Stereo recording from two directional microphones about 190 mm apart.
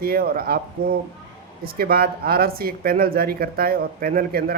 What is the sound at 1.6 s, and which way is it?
Speech, 50° right (ahead or behind).